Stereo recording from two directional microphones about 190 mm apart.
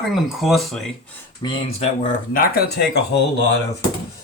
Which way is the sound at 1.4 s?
30° left (ahead or behind).